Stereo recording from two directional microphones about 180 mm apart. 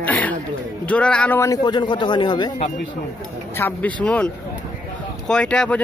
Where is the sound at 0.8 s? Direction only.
5° left (ahead or behind); by 2.5 s 25° left (ahead or behind).